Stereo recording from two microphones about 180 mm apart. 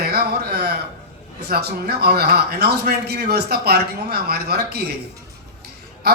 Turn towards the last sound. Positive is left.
turn(degrees=-60)  # may be behind; listen again after turning